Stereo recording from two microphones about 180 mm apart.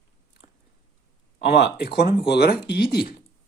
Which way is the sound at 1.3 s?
65° left (ahead or behind).